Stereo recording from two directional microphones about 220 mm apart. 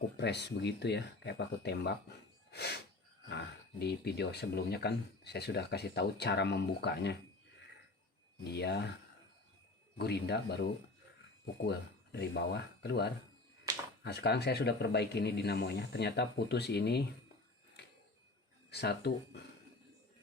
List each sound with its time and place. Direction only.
0.2 s speech: 50° left (ahead or behind)
8.5 s speech: 50° left (ahead or behind)
10.0 s speech: 50° left (ahead or behind)
18.7 s speech: 50° left (ahead or behind)